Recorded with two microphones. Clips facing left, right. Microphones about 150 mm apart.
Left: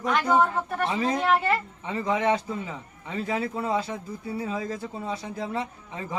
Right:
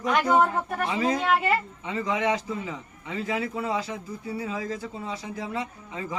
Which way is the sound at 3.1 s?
35° left (ahead or behind).